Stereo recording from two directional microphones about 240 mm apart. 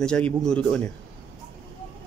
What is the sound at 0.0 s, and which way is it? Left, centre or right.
Speech, centre.